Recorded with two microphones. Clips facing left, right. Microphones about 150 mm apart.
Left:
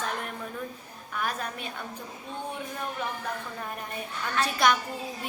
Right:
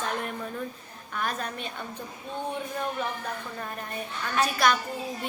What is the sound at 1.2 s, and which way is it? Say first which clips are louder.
Speech: right 1 dB; 10° left (ahead or behind).